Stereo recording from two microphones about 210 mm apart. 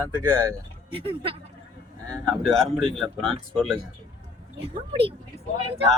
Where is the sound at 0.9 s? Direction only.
25° right (ahead or behind).